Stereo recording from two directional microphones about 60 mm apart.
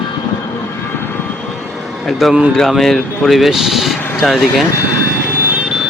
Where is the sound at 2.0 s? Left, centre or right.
Centre.